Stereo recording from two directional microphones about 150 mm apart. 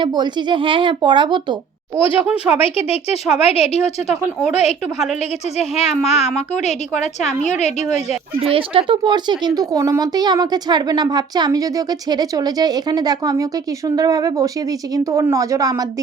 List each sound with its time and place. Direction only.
0.0 s speech: 30° right (ahead or behind)
2.6 s a woman's voice: 40° left (ahead or behind)
8.4 s speech: 35° right (ahead or behind)